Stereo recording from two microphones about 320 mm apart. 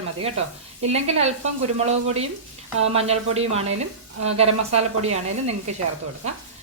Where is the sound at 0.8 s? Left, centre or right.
Centre.